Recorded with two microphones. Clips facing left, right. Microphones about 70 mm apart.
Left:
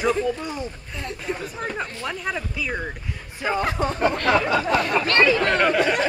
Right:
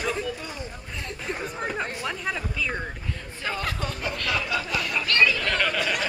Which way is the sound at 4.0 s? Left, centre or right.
Left.